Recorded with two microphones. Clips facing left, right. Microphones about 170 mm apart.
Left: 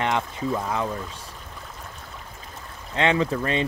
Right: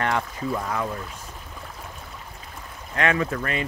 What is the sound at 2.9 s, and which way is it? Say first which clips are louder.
Speech: left 2 dB; 25° left (ahead or behind).